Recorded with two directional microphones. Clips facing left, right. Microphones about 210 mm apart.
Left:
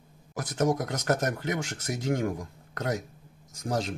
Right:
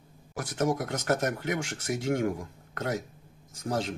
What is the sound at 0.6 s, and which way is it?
Speech, 40° left (ahead or behind).